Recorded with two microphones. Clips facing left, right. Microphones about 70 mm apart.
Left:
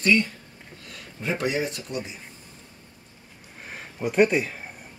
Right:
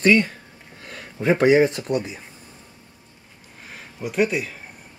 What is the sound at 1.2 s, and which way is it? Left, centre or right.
Speech, right.